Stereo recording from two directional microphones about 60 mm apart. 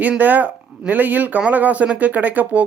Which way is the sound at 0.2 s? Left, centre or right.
Right.